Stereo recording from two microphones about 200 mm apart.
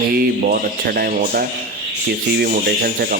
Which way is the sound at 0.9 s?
50° right (ahead or behind).